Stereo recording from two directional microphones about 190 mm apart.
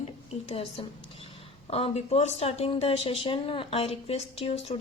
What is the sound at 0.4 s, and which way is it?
Speech, 30° left (ahead or behind).